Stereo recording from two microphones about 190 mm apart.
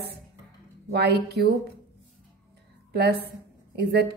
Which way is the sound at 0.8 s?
60° right (ahead or behind).